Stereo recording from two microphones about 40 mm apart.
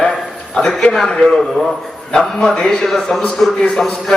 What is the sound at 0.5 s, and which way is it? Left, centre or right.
Speech, centre.